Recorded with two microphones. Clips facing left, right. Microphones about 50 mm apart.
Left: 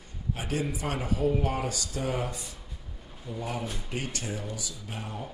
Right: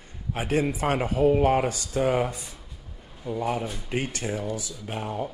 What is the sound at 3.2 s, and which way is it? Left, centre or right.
Speech, right.